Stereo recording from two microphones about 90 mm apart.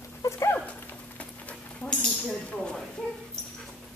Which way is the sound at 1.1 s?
15° left (ahead or behind).